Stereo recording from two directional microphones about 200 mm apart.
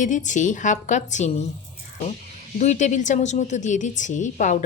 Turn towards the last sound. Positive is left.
turn(degrees=35)  # may be behind; listen again after turning